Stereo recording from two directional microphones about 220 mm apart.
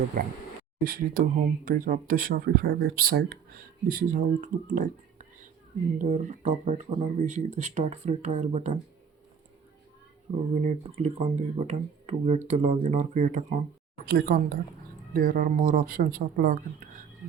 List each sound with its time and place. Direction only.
0.9 s speech: 40° right (ahead or behind)
10.6 s speech: 30° right (ahead or behind)